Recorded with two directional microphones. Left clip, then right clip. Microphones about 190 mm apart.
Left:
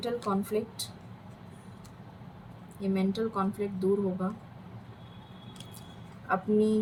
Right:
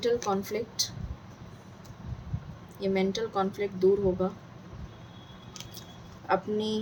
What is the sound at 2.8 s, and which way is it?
Speech, 50° right (ahead or behind).